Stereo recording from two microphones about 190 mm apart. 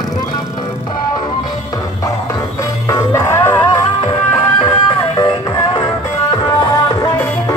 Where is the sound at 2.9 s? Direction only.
15° left (ahead or behind).